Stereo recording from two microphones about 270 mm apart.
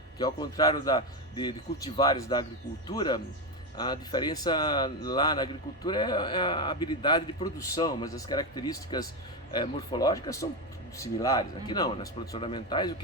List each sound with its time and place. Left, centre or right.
0.2 s speech: centre